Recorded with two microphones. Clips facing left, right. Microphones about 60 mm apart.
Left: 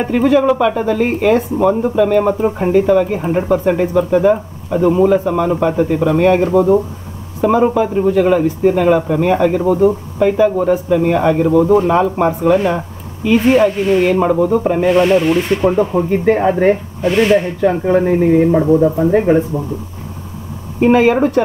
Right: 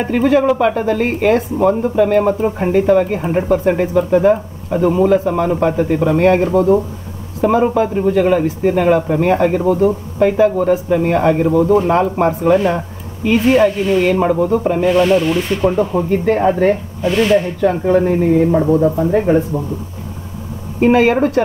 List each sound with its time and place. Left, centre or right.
0.0 s speech: centre
4.7 s speech: centre
9.6 s speech: centre
10.1 s speech: centre
10.5 s speech: centre
10.9 s speech: centre
14.8 s speech: centre
18.7 s speech: centre
18.9 s speech: left
20.8 s speech: centre